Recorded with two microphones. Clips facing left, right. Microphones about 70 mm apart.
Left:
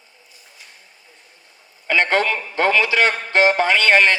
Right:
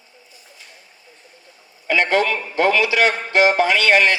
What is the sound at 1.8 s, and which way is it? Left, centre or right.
A man's voice, left.